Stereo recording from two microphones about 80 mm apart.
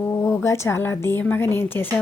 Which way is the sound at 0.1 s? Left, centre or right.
Left.